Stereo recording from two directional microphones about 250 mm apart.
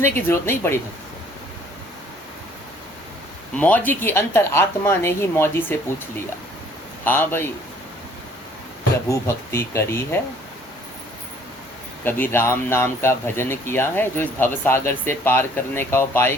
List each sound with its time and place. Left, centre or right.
0.0 s speech: centre
3.6 s speech: centre
7.0 s speech: centre
9.0 s speech: centre
12.0 s speech: centre